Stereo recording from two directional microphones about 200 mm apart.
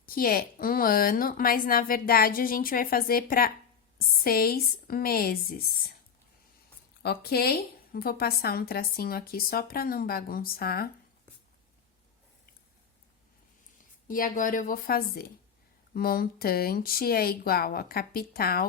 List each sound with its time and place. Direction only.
0.0 s a woman's voice: 45° left (ahead or behind)
7.0 s a woman's voice: 50° left (ahead or behind)
14.1 s a woman's voice: 40° left (ahead or behind)